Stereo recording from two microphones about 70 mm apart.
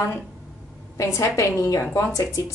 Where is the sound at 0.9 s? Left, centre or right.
Left.